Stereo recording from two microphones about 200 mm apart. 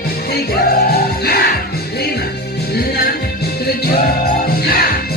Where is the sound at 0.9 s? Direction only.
50° left (ahead or behind).